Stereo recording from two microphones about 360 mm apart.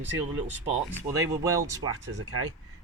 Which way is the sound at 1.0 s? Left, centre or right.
Centre.